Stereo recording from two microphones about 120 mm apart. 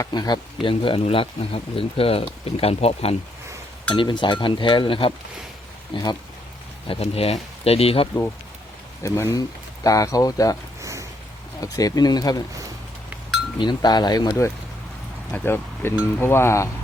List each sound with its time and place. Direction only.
0.1 s speech: 35° left (ahead or behind); by 3.2 s 55° left (ahead or behind)
3.9 s speech: 40° left (ahead or behind)
5.9 s speech: 35° left (ahead or behind)
6.8 s speech: 55° left (ahead or behind)
9.0 s speech: 20° left (ahead or behind)
10.8 s a sound: 25° right (ahead or behind)
11.6 s speech: 30° left (ahead or behind)
13.6 s speech: 35° left (ahead or behind)
15.3 s speech: 20° left (ahead or behind)